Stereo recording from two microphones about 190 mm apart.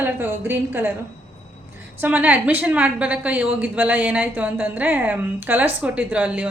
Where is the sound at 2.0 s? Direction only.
10° right (ahead or behind).